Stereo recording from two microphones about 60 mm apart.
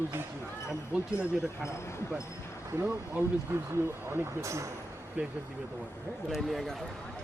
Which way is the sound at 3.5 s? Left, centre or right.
Right.